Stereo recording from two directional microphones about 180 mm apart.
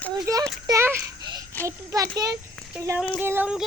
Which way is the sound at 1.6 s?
15° right (ahead or behind).